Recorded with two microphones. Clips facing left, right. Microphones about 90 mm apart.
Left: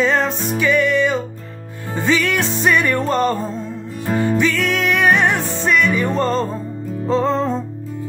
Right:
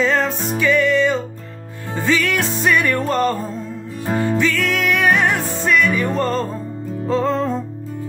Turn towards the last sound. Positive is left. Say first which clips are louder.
# left 1 dB
turn(degrees=25)  # may be behind; listen again after turning